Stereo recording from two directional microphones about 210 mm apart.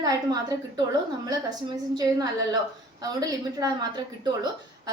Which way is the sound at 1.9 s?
15° right (ahead or behind).